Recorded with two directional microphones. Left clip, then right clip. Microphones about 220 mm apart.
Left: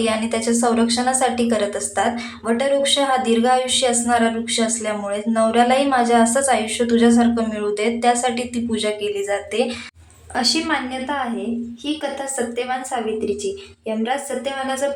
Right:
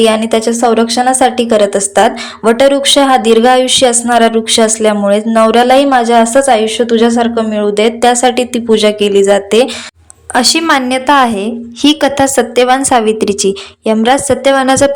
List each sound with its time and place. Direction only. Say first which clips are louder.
0.0 s a woman's voice: right 11 dB; 35° right (ahead or behind)